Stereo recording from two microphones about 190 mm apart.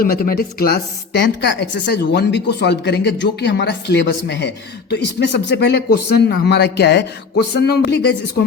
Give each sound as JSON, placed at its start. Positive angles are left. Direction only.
{"t": 0.0, "sound": "speech", "side_deg": 50}